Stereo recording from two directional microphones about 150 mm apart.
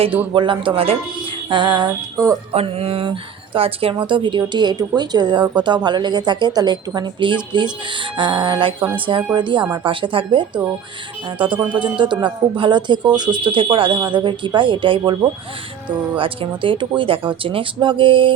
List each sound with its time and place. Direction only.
0.3 s speech: 35° right (ahead or behind)
1.5 s music: 30° right (ahead or behind)
2.5 s speech: 40° right (ahead or behind)